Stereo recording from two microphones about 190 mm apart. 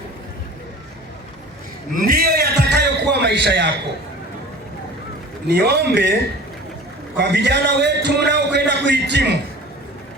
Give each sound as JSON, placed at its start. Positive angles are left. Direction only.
{"t": 1.9, "sound": "a sound", "side_deg": -45}
{"t": 5.5, "sound": "a man's voice", "side_deg": -60}
{"t": 7.2, "sound": "a man's voice", "side_deg": -65}